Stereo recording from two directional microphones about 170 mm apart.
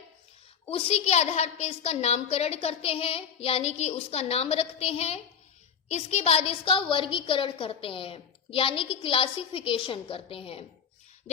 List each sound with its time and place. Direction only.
0.7 s a woman's voice: 35° left (ahead or behind)